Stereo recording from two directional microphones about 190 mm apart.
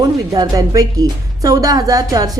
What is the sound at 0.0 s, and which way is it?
A woman's voice, 20° right (ahead or behind).